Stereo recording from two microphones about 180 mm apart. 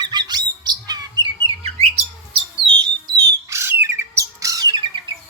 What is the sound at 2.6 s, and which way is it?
Bird, 25° right (ahead or behind).